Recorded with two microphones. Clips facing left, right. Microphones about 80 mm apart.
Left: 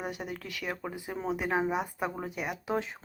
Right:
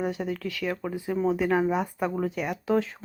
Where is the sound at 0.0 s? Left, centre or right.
Left.